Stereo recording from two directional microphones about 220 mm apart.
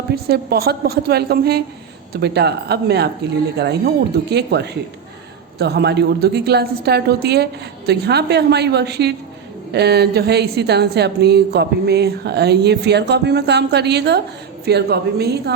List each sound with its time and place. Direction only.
0.1 s a woman's voice: 45° right (ahead or behind)